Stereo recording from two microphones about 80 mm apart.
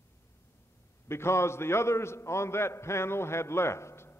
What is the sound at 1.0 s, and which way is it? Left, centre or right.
A man's voice, left.